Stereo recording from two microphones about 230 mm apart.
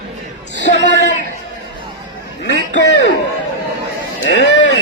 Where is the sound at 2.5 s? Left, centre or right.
Left.